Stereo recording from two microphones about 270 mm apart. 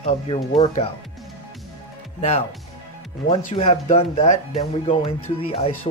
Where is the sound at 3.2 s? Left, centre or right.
Left.